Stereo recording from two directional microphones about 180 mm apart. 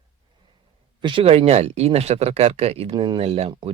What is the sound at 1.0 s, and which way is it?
Speech, 30° right (ahead or behind).